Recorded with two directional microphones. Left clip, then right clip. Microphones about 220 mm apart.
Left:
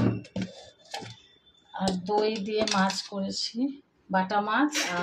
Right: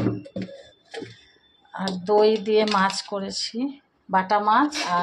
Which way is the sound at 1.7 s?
10° right (ahead or behind).